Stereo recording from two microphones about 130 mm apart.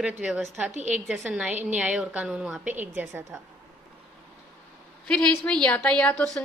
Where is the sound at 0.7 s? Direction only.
65° right (ahead or behind).